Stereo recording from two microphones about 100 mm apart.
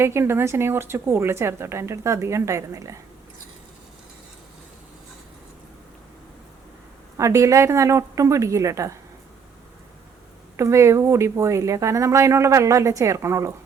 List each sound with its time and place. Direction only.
0.0 s a woman's voice: 25° right (ahead or behind)
7.2 s speech: 30° right (ahead or behind)
10.6 s speech: 30° right (ahead or behind)